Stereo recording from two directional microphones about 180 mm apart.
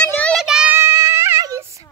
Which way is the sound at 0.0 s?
5° left (ahead or behind).